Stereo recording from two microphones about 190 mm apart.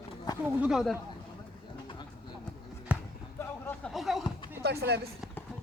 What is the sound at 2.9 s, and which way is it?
Basketball bounce, 5° right (ahead or behind).